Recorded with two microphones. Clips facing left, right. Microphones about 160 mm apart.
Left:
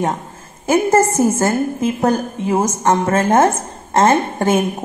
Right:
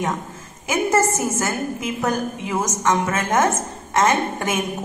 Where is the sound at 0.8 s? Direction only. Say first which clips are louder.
Left 3 dB; 30° left (ahead or behind).